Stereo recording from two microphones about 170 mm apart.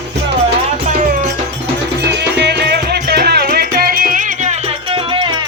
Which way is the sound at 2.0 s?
80° right.